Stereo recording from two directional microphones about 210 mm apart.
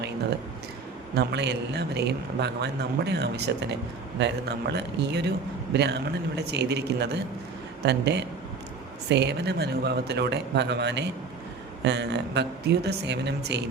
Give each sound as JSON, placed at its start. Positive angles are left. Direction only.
{"t": 1.1, "sound": "a man's voice", "side_deg": -55}